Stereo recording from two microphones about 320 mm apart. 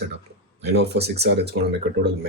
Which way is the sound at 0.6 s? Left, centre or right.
Right.